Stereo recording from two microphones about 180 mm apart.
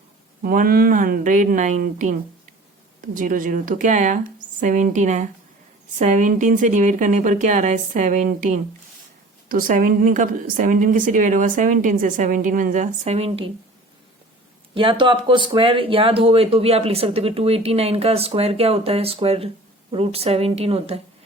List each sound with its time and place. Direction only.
0.4 s a woman's voice: 55° right (ahead or behind); by 13.4 s 35° right (ahead or behind)
14.8 s speech: 25° right (ahead or behind)